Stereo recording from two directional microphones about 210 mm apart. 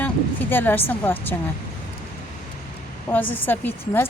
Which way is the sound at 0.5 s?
10° left (ahead or behind).